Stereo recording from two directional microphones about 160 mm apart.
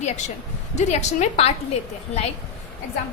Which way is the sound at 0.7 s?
45° left (ahead or behind).